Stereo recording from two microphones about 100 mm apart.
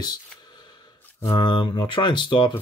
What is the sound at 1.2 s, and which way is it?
Speech, 50° left (ahead or behind).